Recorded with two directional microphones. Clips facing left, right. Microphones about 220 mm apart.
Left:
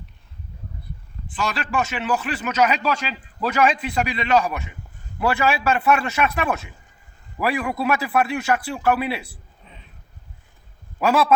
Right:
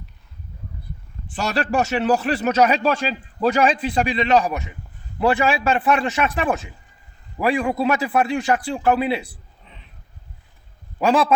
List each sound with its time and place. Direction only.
1.3 s a man's voice: 40° right (ahead or behind); by 9.2 s 25° right (ahead or behind)